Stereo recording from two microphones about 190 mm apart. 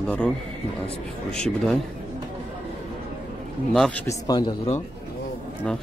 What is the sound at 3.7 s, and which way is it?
Speech, 5° left (ahead or behind).